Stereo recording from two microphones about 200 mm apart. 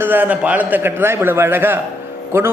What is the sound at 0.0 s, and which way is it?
Speech, 10° right (ahead or behind).